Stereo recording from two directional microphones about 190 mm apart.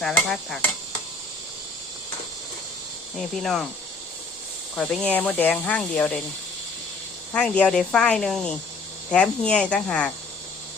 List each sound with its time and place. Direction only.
0.1 s speech: 5° left (ahead or behind)
3.2 s speech: centre (ahead or behind)
4.7 s speech: 5° left (ahead or behind)
7.3 s speech: 5° left (ahead or behind)